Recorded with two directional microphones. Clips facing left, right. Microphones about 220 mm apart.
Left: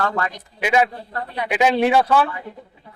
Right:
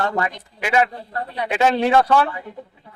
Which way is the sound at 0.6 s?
20° left (ahead or behind).